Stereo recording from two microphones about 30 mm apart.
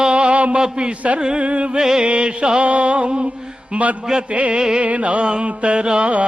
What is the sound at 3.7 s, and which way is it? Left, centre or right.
Speech, right.